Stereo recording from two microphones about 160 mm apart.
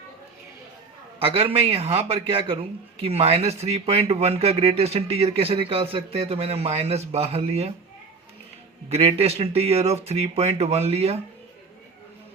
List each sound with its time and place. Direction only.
1.2 s a man's voice: 35° right (ahead or behind)
8.9 s a man's voice: 35° right (ahead or behind)